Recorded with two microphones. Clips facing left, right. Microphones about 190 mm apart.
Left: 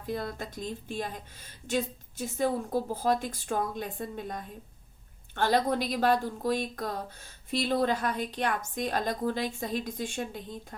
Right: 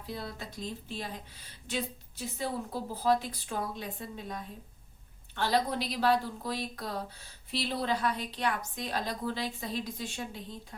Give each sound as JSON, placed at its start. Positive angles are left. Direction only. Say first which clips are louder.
{"t": 0.0, "sound": "speech", "louder": "left 6 dB", "side_deg": 50}